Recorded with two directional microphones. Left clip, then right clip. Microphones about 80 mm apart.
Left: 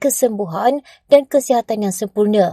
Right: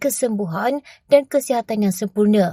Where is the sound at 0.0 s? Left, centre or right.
Left.